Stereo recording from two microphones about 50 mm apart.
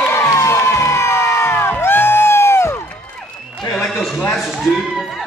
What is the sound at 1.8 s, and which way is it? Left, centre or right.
Music, left.